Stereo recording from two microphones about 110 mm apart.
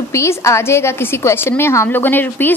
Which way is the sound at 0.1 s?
25° left (ahead or behind).